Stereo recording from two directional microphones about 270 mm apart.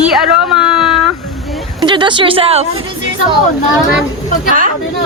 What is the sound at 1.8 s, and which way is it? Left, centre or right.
Speech, centre.